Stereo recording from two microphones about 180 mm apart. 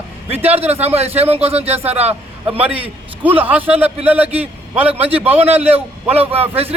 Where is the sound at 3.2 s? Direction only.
10° right (ahead or behind).